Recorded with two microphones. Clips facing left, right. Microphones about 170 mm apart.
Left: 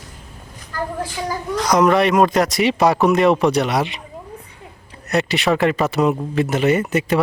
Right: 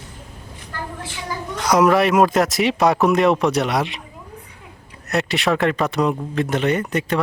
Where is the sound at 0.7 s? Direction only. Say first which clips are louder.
Left 7 dB; 40° left (ahead or behind).